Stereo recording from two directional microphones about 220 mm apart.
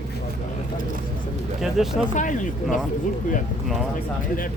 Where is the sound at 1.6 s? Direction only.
Centre (ahead or behind).